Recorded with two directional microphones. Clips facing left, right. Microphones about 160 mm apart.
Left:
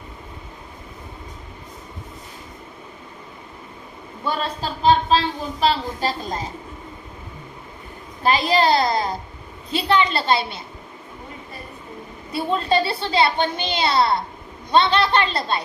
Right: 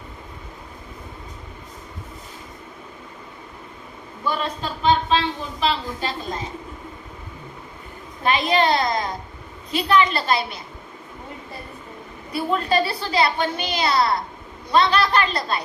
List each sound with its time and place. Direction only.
4.2 s a woman's voice: 35° left (ahead or behind)
8.2 s a woman's voice: 35° left (ahead or behind)
12.3 s a woman's voice: 30° left (ahead or behind)